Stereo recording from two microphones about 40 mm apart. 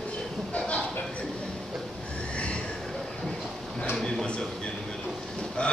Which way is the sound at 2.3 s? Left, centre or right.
Left.